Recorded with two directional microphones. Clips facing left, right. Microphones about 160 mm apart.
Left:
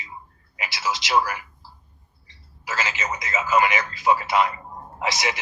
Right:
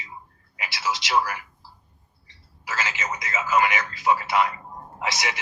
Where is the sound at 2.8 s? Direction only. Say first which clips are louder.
Left 2 dB; 20° left (ahead or behind).